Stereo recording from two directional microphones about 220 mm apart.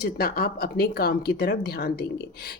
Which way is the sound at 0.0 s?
45° left (ahead or behind).